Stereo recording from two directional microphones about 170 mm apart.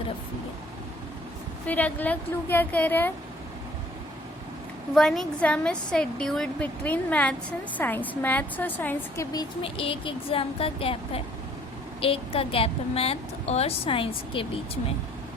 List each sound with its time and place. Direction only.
1.6 s a woman's voice: 10° left (ahead or behind)
4.9 s a woman's voice: centre (ahead or behind)
9.3 s a woman's voice: 25° left (ahead or behind)